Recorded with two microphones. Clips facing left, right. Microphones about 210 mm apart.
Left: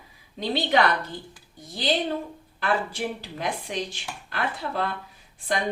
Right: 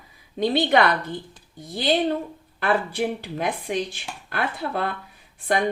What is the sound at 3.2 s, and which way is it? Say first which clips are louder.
Speech: right 4 dB; 55° right (ahead or behind).